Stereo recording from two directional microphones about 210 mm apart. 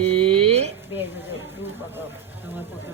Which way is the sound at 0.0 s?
25° right (ahead or behind).